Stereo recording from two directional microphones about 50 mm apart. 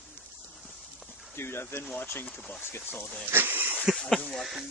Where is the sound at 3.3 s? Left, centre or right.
Right.